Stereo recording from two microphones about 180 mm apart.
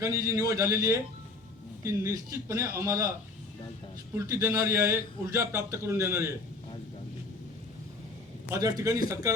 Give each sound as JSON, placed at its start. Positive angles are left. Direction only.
{"t": 0.0, "sound": "a man's voice", "side_deg": -20}
{"t": 4.1, "sound": "a man's voice", "side_deg": -15}
{"t": 8.4, "sound": "speech", "side_deg": -20}